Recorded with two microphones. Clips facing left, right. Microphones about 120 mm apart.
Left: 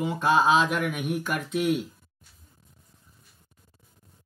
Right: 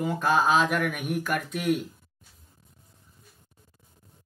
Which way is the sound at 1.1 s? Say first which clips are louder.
Even; centre (ahead or behind).